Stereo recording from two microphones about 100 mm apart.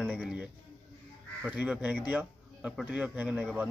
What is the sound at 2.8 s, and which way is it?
Speech, 15° right (ahead or behind).